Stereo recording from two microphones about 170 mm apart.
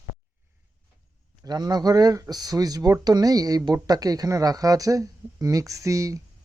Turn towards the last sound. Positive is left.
turn(degrees=-20)  # may be behind; listen again after turning